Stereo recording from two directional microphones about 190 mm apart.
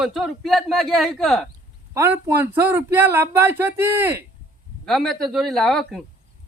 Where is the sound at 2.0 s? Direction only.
15° right (ahead or behind).